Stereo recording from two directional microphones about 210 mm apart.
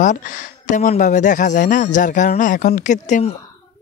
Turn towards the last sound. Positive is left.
turn(degrees=35)  # may be behind; listen again after turning